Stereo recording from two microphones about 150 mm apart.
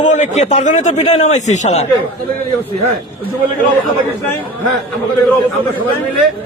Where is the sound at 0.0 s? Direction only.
55° left (ahead or behind).